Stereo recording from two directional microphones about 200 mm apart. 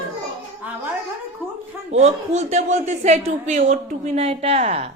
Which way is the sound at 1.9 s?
35° right (ahead or behind).